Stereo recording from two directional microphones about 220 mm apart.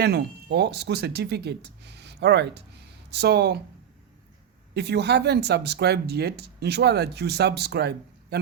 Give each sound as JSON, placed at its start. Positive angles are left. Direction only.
{"t": 0.0, "sound": "speech", "side_deg": -45}
{"t": 4.7, "sound": "speech", "side_deg": -50}